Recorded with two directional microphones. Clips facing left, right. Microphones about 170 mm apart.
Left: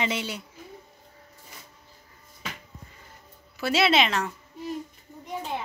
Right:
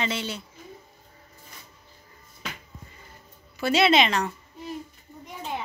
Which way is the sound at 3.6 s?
Centre (ahead or behind).